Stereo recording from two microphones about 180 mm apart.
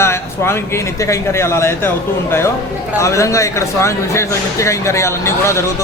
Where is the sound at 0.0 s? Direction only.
15° left (ahead or behind).